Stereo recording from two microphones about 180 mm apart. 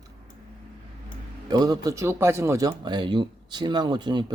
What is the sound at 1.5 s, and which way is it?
Speech, 20° right (ahead or behind).